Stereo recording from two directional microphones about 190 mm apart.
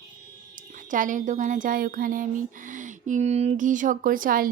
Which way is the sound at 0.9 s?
45° right (ahead or behind).